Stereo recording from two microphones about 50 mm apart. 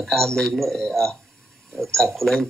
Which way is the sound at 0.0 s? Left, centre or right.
Centre.